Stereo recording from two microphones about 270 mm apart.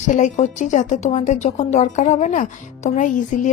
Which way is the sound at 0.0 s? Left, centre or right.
Left.